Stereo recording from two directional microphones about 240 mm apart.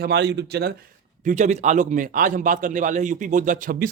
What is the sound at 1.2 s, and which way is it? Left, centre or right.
A man's voice, right.